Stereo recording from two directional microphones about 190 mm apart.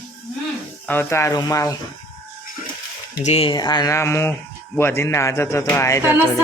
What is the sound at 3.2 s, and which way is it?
A man's voice, 30° left (ahead or behind).